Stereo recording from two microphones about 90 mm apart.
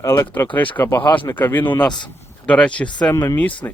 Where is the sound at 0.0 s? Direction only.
30° left (ahead or behind); by 3.1 s 15° left (ahead or behind).